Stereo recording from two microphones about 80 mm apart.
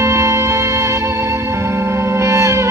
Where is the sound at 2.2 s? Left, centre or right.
Right.